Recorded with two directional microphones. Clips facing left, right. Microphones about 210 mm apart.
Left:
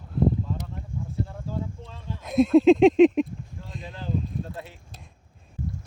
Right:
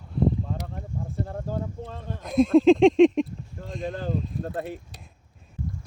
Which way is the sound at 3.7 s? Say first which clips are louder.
Right 7 dB; 50° right (ahead or behind).